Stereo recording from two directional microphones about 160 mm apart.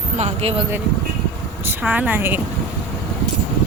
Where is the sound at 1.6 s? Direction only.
10° right (ahead or behind).